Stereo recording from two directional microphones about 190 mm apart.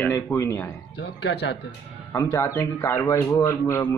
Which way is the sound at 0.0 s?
15° left (ahead or behind).